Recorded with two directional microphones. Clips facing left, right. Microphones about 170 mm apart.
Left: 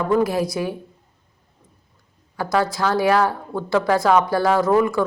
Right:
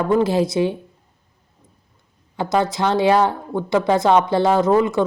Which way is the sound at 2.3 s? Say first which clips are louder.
Right 1 dB; 20° right (ahead or behind).